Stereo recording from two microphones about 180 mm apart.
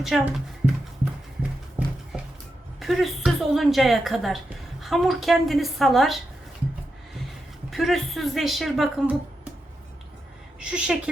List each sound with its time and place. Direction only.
0.0 s speech: 5° right (ahead or behind)
2.1 s music: centre (ahead or behind)
2.8 s speech: centre (ahead or behind)
7.7 s speech: centre (ahead or behind)
10.6 s speech: 5° right (ahead or behind)